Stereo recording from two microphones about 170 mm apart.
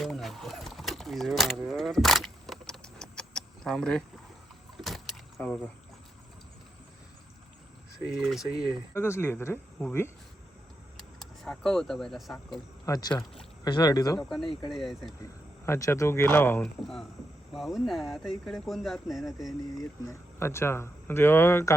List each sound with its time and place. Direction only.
0.0 s livestock: centre (ahead or behind)
4.8 s vehicle: centre (ahead or behind)
7.9 s speech: centre (ahead or behind)
9.0 s speech: 15° left (ahead or behind)
10.9 s speech: 5° left (ahead or behind)
12.8 s speech: 20° left (ahead or behind)
14.2 s speech: centre (ahead or behind)
15.2 s speech: 15° left (ahead or behind)
16.6 s speech: centre (ahead or behind)
19.8 s speech: 15° left (ahead or behind)